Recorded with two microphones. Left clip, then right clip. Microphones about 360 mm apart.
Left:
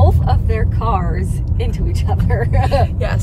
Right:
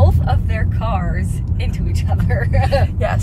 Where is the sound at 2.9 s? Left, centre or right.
Centre.